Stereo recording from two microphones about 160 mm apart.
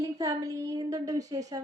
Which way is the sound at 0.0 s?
20° right (ahead or behind).